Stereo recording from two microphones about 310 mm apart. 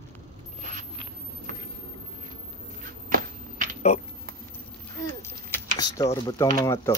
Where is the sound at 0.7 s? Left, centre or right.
Right.